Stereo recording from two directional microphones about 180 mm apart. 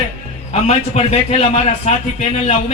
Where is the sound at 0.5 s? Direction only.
35° left (ahead or behind).